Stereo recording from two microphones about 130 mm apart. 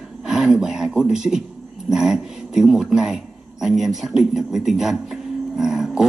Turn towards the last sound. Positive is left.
turn(degrees=-5)  # may be behind; listen again after turning